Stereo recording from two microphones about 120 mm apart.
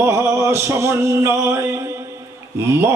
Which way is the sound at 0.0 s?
20° right (ahead or behind).